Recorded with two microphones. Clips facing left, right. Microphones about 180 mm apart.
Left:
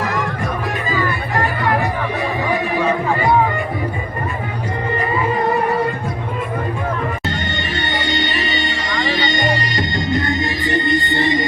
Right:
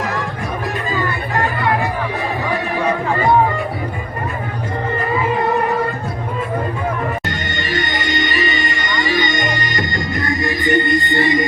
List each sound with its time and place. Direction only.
7.3 s music: 30° left (ahead or behind)